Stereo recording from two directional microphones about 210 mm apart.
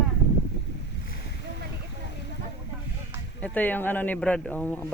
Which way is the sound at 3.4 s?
10° left (ahead or behind).